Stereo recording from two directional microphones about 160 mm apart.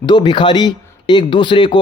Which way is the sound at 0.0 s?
30° left (ahead or behind).